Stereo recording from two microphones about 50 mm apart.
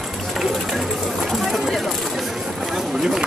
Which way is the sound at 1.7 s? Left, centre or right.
Centre.